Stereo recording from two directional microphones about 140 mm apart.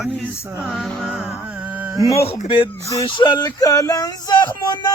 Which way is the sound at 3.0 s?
35° left (ahead or behind).